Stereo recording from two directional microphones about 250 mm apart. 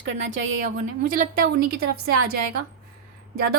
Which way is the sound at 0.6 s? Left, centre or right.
Right.